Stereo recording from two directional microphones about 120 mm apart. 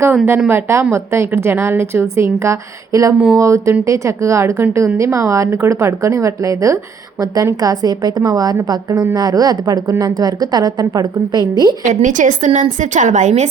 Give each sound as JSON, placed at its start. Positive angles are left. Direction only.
{"t": 0.4, "sound": "a woman's voice", "side_deg": -20}
{"t": 11.9, "sound": "a woman's voice", "side_deg": -90}